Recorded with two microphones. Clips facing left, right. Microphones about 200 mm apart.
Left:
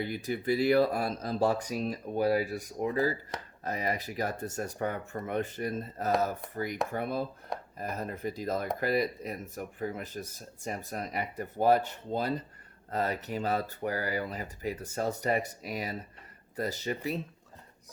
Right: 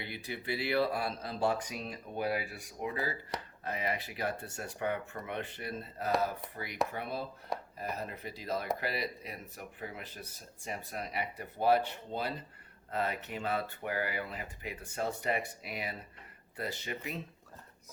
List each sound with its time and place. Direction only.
0.0 s speech: 45° left (ahead or behind)